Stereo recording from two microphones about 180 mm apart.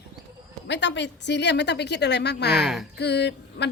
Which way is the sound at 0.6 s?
80° left.